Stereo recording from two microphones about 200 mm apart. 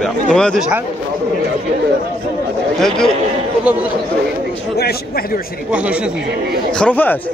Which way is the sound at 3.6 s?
10° right (ahead or behind).